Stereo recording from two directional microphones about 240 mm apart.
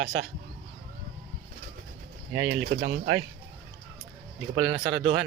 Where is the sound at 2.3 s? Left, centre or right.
Right.